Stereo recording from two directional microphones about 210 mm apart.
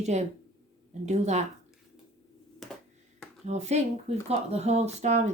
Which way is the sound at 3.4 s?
30° right (ahead or behind).